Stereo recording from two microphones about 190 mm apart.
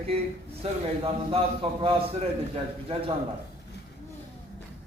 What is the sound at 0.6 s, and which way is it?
A man's voice, 30° right (ahead or behind).